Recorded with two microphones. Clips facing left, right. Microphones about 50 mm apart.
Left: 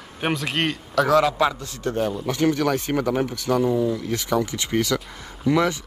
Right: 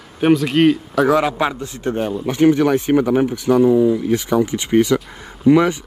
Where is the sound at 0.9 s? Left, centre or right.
Centre.